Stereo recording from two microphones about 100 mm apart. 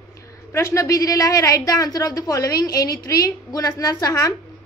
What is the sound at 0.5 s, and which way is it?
A woman's voice, 25° left (ahead or behind).